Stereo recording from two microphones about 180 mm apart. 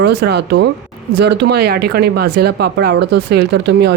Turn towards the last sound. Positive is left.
turn(degrees=-70)  # may be behind; listen again after turning